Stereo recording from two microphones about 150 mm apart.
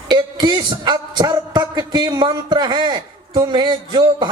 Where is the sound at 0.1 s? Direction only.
30° right (ahead or behind).